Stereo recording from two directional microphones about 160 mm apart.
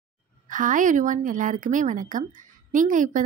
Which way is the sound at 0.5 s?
55° right (ahead or behind).